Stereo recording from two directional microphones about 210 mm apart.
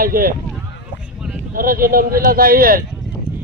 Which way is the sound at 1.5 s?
40° right (ahead or behind).